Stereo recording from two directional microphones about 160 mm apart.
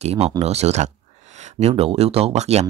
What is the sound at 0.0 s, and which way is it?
Speech, 40° right (ahead or behind).